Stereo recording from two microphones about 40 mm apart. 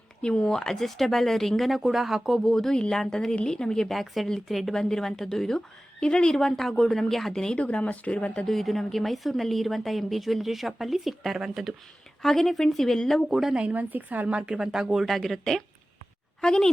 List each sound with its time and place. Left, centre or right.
0.2 s speech: left; by 2.4 s centre
2.4 s speech: centre
4.0 s speech: centre
4.7 s speech: centre
6.3 s speech: centre
7.5 s speech: left
8.4 s speech: centre
12.2 s speech: centre
13.2 s speech: centre
13.5 s speech: right
13.7 s a woman's voice: right
14.5 s speech: centre
15.0 s speech: centre